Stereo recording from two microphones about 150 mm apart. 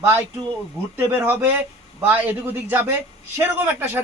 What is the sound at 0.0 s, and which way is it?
A man's voice, 15° right (ahead or behind).